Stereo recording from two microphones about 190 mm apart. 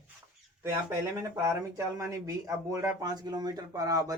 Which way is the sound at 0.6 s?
15° right (ahead or behind).